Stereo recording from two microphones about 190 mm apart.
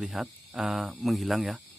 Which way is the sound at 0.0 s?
Centre (ahead or behind).